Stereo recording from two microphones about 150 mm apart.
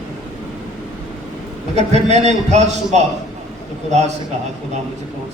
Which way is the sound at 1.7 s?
50° right (ahead or behind).